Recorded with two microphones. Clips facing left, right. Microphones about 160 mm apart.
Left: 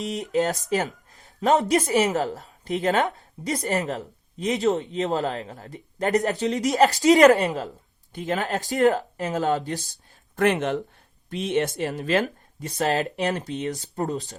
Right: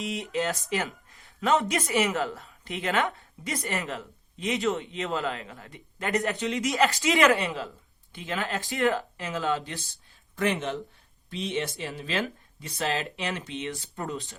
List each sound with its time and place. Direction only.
0.0 s speech: 40° left (ahead or behind)
10.3 s speech: 55° left (ahead or behind); by 14.3 s 40° left (ahead or behind)